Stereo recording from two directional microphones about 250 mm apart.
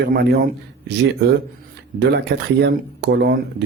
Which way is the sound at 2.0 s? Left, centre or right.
Right.